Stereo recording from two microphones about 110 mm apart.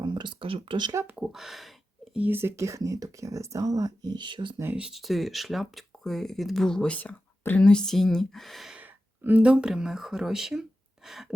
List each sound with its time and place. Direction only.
0.0 s speech: 45° right (ahead or behind)
1.1 s speech: 5° right (ahead or behind)
2.1 s speech: 15° right (ahead or behind); by 4.5 s 45° right (ahead or behind)
4.5 s speech: 20° right (ahead or behind)
4.8 s speech: 5° right (ahead or behind)
8.8 s speech: 15° right (ahead or behind)